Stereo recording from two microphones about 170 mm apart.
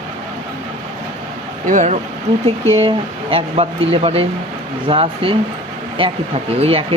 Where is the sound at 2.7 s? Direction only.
35° right (ahead or behind).